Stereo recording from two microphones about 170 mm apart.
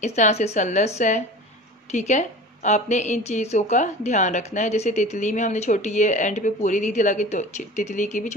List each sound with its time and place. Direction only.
0.0 s a woman's voice: 40° left (ahead or behind)